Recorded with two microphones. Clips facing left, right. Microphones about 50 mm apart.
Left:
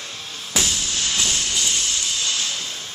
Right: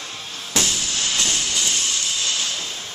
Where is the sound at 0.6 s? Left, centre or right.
Centre.